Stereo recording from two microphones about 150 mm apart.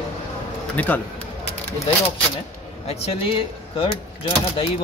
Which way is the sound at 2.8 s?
40° left (ahead or behind).